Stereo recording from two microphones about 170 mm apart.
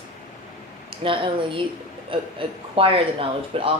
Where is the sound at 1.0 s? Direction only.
30° right (ahead or behind).